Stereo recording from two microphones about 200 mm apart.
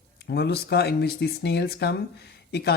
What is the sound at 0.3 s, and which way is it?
Speech, 55° left (ahead or behind).